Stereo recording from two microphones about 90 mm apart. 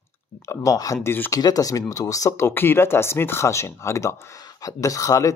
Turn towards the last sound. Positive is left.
turn(degrees=40)  # may be behind; listen again after turning